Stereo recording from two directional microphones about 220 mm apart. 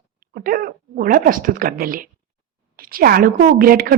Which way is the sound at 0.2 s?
40° right (ahead or behind).